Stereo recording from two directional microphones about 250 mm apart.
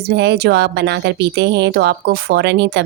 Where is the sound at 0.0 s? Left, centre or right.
Right.